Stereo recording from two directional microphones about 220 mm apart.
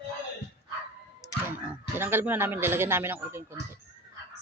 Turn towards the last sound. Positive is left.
turn(degrees=-10)  # may be behind; listen again after turning